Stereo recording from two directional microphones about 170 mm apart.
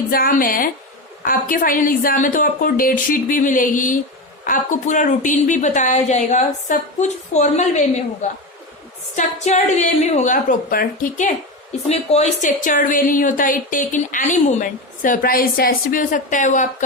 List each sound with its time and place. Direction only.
0.1 s a woman's voice: 60° left (ahead or behind); by 7.9 s 40° left (ahead or behind)
9.1 s a woman's voice: 40° left (ahead or behind)
11.9 s a woman's voice: 40° left (ahead or behind)